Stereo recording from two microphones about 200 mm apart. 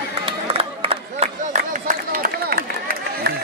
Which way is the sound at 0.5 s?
30° right (ahead or behind).